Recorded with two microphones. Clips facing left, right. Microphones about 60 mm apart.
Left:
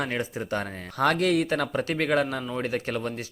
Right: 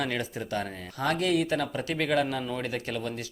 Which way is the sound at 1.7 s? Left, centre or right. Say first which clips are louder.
Left 3 dB; left.